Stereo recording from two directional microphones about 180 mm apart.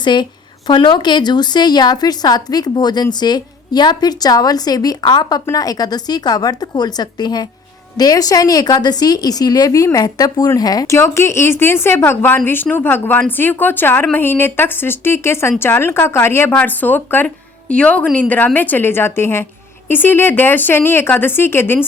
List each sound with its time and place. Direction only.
0.0 s a woman's voice: 25° left (ahead or behind)